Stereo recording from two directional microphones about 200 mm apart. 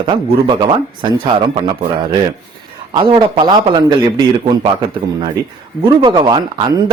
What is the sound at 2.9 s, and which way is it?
Speech, 25° right (ahead or behind).